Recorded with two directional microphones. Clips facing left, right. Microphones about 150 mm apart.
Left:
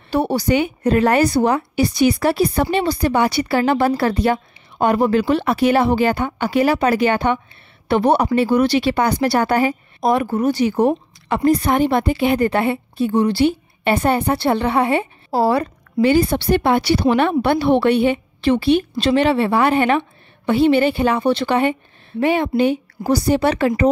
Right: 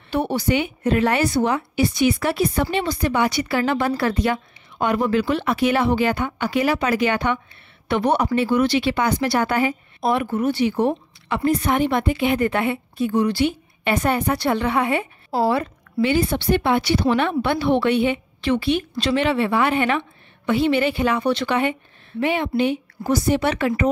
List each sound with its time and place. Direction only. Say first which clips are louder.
0.1 s speech: left 3 dB; 35° left (ahead or behind)